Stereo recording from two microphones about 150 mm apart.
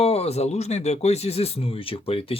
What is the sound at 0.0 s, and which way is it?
Speech, 40° left (ahead or behind).